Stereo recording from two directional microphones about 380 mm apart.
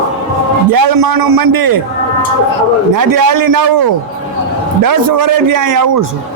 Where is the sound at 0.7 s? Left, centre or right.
Right.